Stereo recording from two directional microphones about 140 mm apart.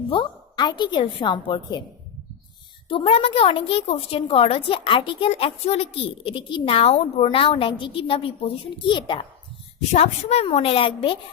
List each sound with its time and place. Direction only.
0.1 s a woman's voice: 35° left (ahead or behind)
2.9 s a woman's voice: 40° left (ahead or behind)
9.9 s a woman's voice: 50° left (ahead or behind)